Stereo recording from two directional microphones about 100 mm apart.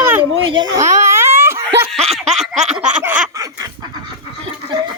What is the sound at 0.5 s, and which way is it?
Speech, 45° right (ahead or behind).